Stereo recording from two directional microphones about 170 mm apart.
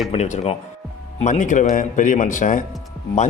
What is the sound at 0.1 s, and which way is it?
A man's voice, 40° left (ahead or behind).